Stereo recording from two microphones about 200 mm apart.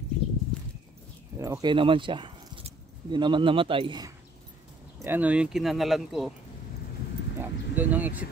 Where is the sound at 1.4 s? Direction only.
20° right (ahead or behind).